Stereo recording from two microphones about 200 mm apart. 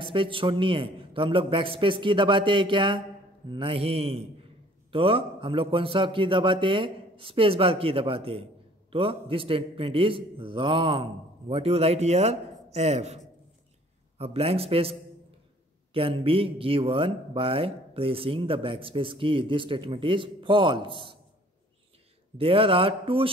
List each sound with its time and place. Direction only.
0.0 s speech: 25° right (ahead or behind)
22.4 s speech: 30° right (ahead or behind)